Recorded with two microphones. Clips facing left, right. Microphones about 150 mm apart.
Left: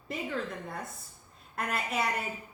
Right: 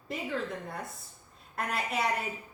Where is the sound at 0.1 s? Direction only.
Centre (ahead or behind).